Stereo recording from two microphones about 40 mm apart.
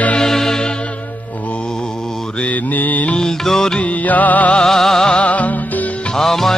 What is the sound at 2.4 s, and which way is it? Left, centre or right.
Mantra, left.